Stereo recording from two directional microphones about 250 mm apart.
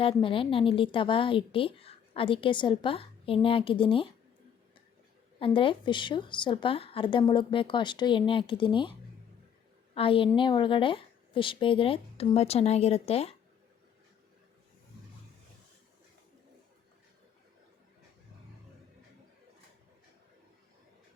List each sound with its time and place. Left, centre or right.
0.0 s a woman's voice: left
5.4 s a woman's voice: left